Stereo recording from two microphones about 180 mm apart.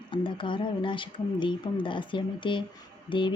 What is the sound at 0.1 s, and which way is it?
Speech, 25° left (ahead or behind).